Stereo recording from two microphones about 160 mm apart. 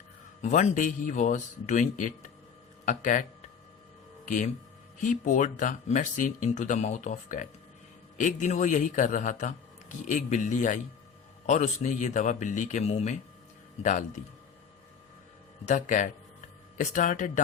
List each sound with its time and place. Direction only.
0.4 s speech: 50° left (ahead or behind)
5.0 s speech: 50° left (ahead or behind)
15.6 s speech: 50° left (ahead or behind)